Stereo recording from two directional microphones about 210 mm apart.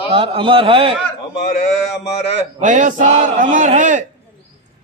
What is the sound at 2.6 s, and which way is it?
A man's voice, 35° right (ahead or behind).